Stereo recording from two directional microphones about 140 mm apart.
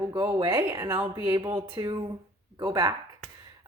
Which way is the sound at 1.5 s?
35° right (ahead or behind).